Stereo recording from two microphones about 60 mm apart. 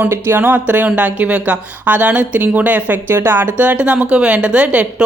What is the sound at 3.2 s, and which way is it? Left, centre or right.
Speech, right.